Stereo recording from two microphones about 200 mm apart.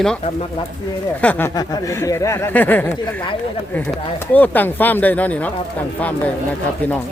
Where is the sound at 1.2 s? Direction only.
10° left (ahead or behind).